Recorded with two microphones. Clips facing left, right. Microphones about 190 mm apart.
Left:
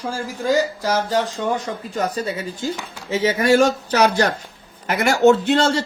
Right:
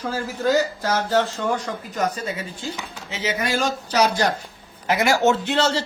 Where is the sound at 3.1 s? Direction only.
50° left (ahead or behind).